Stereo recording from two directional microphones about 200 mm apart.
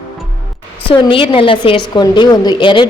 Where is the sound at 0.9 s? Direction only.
25° left (ahead or behind).